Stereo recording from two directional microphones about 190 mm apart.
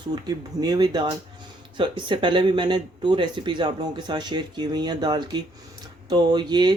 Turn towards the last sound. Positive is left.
turn(degrees=-20)  # may be behind; listen again after turning